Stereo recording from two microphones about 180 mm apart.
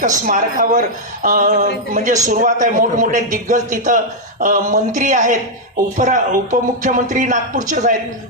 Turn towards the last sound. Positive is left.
turn(degrees=-45)  # may be behind; listen again after turning